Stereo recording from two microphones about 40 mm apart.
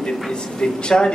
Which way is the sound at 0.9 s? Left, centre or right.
Centre.